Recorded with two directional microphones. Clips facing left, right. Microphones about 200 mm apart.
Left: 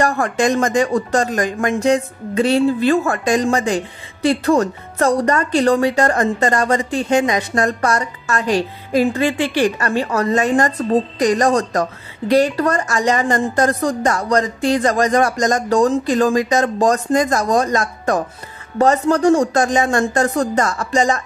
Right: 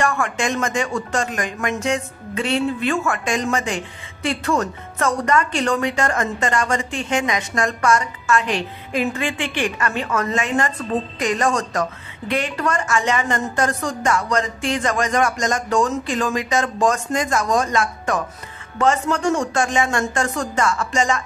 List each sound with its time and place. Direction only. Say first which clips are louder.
0.0 s speech: left 5 dB; 35° left (ahead or behind)